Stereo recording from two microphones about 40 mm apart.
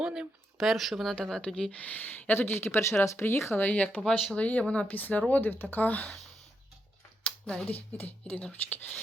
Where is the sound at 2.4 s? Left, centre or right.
Left.